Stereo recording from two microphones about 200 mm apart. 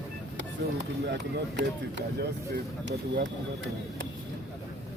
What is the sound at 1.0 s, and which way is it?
Speech, 60° right (ahead or behind).